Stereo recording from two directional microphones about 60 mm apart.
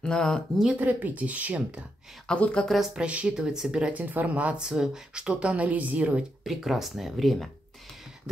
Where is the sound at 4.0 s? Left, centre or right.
Right.